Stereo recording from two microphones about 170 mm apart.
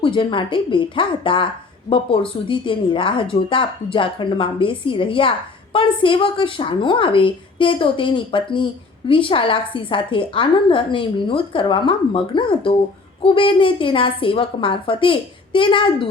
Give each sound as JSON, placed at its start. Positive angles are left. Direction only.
{"t": 0.0, "sound": "a woman's voice", "side_deg": 30}